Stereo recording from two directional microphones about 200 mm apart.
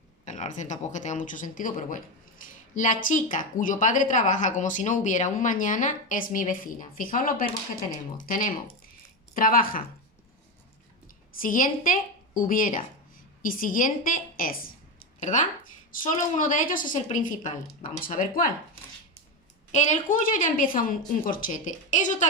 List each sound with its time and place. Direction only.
0.3 s a woman's voice: 35° left (ahead or behind)
11.3 s a woman's voice: 40° left (ahead or behind)
19.7 s a woman's voice: 35° left (ahead or behind)